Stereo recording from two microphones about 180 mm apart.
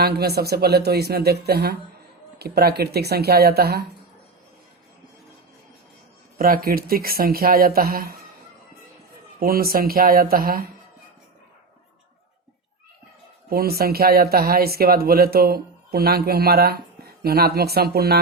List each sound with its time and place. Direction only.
0.0 s speech: 60° right (ahead or behind)
6.4 s speech: 55° right (ahead or behind)
9.4 s speech: 55° right (ahead or behind)
13.5 s speech: 55° right (ahead or behind)